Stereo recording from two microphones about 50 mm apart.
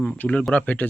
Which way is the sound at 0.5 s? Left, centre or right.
Left.